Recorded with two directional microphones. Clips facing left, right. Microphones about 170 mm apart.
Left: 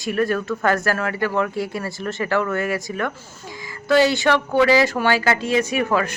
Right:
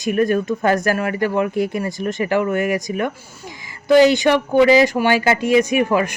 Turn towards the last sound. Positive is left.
turn(degrees=-15)  # may be behind; listen again after turning